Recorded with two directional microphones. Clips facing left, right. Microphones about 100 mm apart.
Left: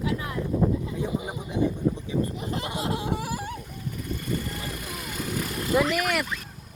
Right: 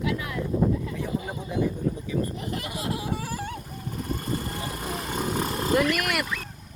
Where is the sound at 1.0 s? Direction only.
15° left (ahead or behind).